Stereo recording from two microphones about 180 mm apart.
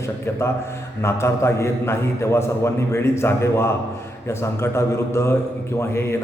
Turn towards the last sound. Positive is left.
turn(degrees=15)  # may be behind; listen again after turning